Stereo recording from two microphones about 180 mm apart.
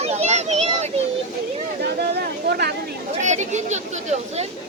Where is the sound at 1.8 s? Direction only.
65° right (ahead or behind).